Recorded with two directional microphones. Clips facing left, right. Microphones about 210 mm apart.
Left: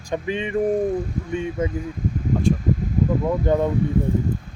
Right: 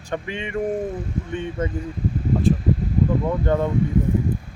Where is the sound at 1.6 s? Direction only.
10° left (ahead or behind).